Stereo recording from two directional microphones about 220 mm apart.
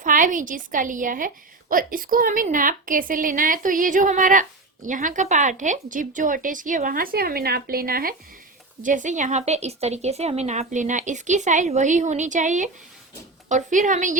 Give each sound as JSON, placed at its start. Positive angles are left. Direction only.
{"t": 0.0, "sound": "a woman's voice", "side_deg": -35}